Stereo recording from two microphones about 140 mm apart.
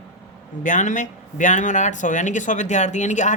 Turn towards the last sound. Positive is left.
turn(degrees=60)  # may be behind; listen again after turning